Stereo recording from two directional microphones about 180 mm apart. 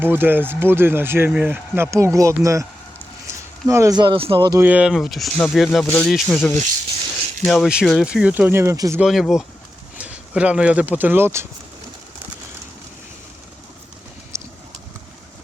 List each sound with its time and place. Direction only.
0.0 s speech: 10° right (ahead or behind)
3.7 s speech: 15° right (ahead or behind)
4.6 s speech: 5° right (ahead or behind)
9.0 s speech: centre (ahead or behind)
14.3 s clip-clop: 15° right (ahead or behind)